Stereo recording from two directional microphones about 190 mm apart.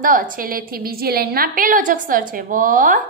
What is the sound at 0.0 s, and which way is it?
A woman's voice, 45° right (ahead or behind).